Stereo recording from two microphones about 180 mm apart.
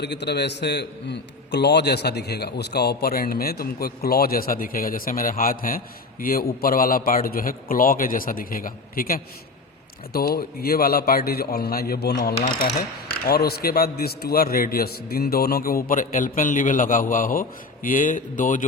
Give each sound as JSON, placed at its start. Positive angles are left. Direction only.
{"t": 0.0, "sound": "a man's voice", "side_deg": 70}